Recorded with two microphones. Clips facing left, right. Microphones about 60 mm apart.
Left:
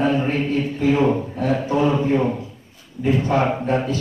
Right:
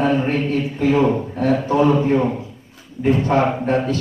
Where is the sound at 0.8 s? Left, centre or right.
Right.